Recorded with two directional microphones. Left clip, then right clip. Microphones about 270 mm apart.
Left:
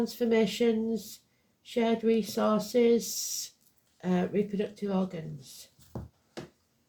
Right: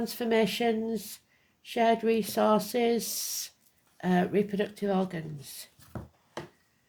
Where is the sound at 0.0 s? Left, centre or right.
Right.